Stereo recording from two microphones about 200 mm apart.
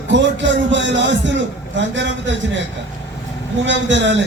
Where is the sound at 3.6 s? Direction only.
65° right (ahead or behind).